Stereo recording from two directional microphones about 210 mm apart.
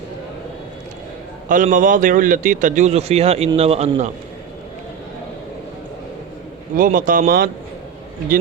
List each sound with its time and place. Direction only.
1.5 s a man's voice: 40° right (ahead or behind)
6.7 s a man's voice: 40° right (ahead or behind)